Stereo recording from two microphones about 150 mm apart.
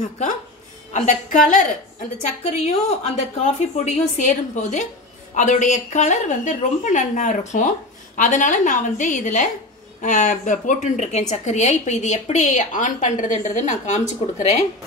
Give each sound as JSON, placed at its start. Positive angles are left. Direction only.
{"t": 0.9, "sound": "a woman's voice", "side_deg": 60}
{"t": 2.4, "sound": "a woman's voice", "side_deg": 45}